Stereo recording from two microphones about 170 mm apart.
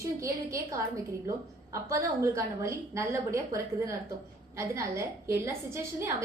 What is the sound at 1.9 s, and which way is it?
A woman's voice, 20° right (ahead or behind).